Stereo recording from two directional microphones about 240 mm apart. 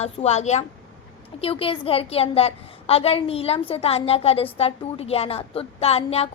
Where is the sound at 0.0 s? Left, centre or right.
Left.